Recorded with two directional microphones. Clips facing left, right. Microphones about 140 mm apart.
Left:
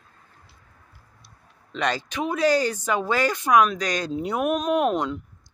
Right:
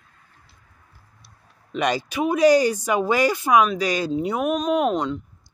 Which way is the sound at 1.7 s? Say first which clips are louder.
Right 3 dB; 10° right (ahead or behind).